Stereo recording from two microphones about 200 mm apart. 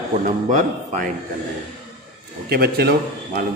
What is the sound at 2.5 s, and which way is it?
Speech, 50° right (ahead or behind).